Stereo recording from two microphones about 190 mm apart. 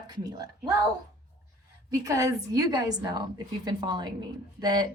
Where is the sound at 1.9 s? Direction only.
15° right (ahead or behind).